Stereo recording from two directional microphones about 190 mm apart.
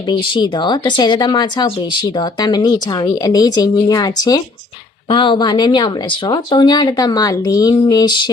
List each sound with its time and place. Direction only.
0.1 s speech: 25° left (ahead or behind)